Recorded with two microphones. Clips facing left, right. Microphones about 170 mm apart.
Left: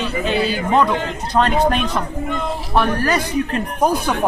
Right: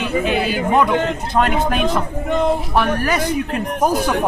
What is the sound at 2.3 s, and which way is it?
Speech, 20° right (ahead or behind).